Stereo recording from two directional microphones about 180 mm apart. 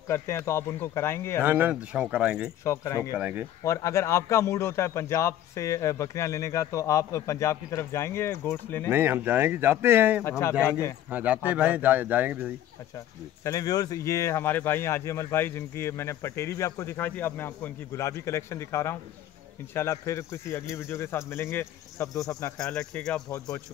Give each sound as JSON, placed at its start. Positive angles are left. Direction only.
{"t": 0.1, "sound": "speech", "side_deg": 15}
{"t": 1.4, "sound": "speech", "side_deg": -10}
{"t": 2.6, "sound": "speech", "side_deg": 15}
{"t": 3.1, "sound": "speech", "side_deg": -10}
{"t": 3.6, "sound": "speech", "side_deg": 15}
{"t": 8.9, "sound": "speech", "side_deg": -10}
{"t": 10.6, "sound": "speech", "side_deg": 15}
{"t": 11.1, "sound": "speech", "side_deg": -10}
{"t": 13.4, "sound": "speech", "side_deg": 20}
{"t": 22.6, "sound": "speech", "side_deg": 5}